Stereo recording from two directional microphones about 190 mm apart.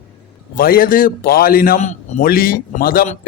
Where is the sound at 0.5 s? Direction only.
50° left (ahead or behind).